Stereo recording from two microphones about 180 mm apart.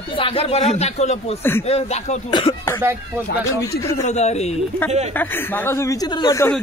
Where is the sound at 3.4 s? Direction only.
15° left (ahead or behind).